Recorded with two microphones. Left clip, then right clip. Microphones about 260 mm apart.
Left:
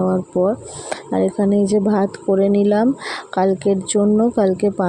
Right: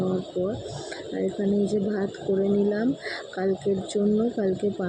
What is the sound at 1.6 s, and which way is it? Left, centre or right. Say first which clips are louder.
Speech: left 9 dB; left.